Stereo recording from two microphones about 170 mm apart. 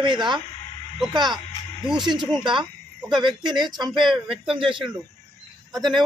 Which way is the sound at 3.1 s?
25° right (ahead or behind).